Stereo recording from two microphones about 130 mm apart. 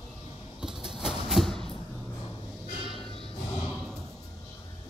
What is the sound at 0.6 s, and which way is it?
Train, 5° right (ahead or behind).